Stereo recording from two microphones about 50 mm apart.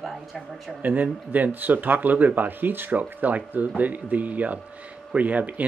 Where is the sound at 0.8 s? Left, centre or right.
Right.